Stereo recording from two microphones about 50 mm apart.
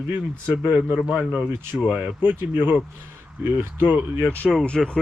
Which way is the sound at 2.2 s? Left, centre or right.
Right.